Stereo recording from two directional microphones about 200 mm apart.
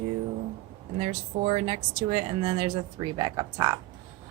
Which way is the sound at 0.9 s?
35° right (ahead or behind).